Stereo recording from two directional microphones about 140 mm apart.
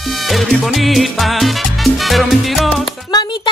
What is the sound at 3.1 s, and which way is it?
Speech, 30° left (ahead or behind).